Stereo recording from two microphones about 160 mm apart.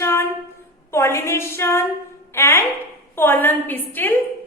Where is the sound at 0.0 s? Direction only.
15° left (ahead or behind).